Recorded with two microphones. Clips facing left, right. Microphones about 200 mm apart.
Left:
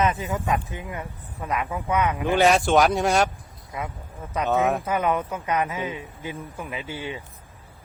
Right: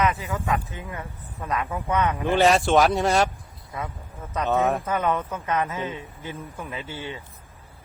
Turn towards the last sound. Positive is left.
turn(degrees=15)  # may be behind; listen again after turning